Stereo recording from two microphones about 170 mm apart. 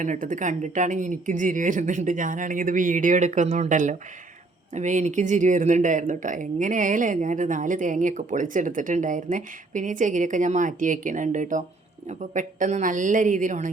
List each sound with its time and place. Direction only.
0.0 s speech: 50° right (ahead or behind)